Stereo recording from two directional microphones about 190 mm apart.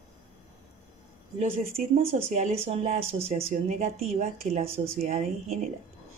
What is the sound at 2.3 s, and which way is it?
Speech, 40° right (ahead or behind).